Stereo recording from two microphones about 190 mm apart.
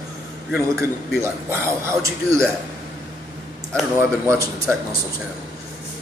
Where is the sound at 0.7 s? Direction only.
15° right (ahead or behind).